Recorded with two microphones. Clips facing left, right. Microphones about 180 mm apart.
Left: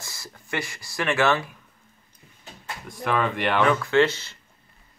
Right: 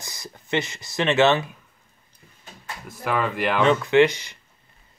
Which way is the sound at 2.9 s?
5° right (ahead or behind).